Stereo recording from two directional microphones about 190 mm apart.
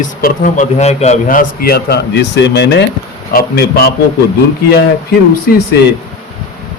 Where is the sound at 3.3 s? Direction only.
50° left (ahead or behind).